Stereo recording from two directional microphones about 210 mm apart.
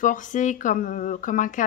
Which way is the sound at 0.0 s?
40° left (ahead or behind).